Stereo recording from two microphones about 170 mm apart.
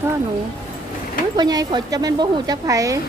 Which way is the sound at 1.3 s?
25° right (ahead or behind).